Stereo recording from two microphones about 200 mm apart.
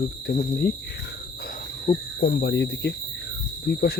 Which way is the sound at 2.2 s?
60° left (ahead or behind).